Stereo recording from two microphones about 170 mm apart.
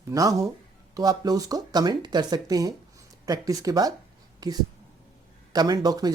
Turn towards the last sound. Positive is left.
turn(degrees=-20)  # may be behind; listen again after turning